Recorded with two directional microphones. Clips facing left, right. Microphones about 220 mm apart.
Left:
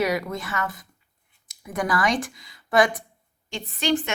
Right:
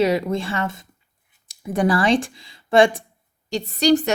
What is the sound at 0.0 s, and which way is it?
A woman's voice, 25° right (ahead or behind).